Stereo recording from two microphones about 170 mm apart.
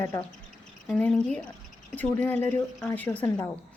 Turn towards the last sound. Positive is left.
turn(degrees=15)  # may be behind; listen again after turning